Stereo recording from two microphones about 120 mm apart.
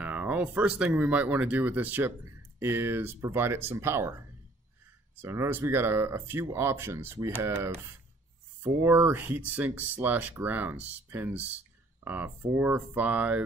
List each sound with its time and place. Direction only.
0.0 s speech: 15° right (ahead or behind)